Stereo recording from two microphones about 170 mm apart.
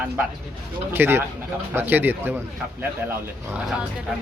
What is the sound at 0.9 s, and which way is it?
Speech, 15° right (ahead or behind).